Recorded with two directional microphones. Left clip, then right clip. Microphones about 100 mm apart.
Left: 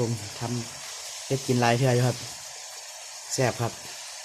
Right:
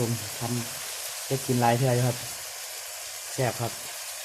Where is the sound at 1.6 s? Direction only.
45° left (ahead or behind).